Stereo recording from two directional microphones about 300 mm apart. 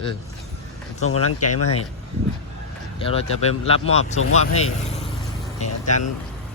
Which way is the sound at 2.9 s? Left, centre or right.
Centre.